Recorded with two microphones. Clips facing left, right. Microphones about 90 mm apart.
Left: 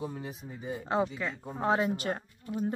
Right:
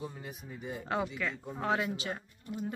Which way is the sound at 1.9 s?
50° left (ahead or behind).